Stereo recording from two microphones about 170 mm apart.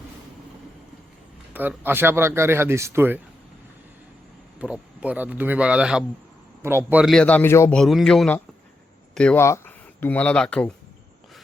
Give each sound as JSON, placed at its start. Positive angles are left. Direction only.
{"t": 1.5, "sound": "speech", "side_deg": -10}
{"t": 4.6, "sound": "speech", "side_deg": -5}
{"t": 7.0, "sound": "a man's voice", "side_deg": 5}
{"t": 7.8, "sound": "speech", "side_deg": 0}